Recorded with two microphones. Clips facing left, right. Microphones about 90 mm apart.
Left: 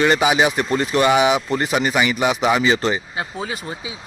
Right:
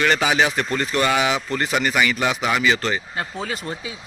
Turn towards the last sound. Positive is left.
turn(degrees=5)  # may be behind; listen again after turning